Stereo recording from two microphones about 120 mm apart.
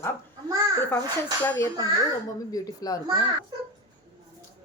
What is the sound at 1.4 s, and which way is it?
Speech, 20° left (ahead or behind).